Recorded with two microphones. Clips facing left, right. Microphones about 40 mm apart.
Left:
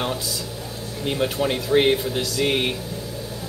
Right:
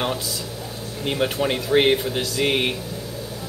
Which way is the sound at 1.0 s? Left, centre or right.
Centre.